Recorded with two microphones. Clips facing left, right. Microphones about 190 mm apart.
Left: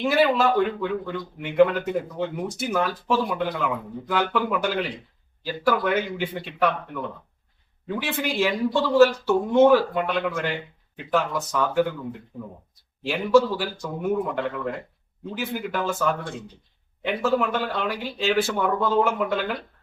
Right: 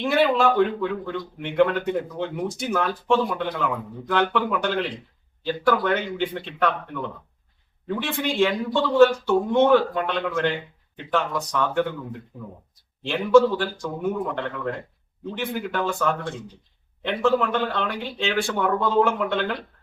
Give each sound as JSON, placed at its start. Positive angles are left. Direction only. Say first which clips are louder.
{"t": 0.0, "sound": "a man's voice", "louder": "even", "side_deg": 5}
{"t": 13.0, "sound": "speech", "louder": "right 2 dB", "side_deg": 5}